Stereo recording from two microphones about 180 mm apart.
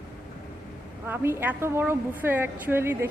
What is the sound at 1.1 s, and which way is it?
A woman's voice, 15° right (ahead or behind).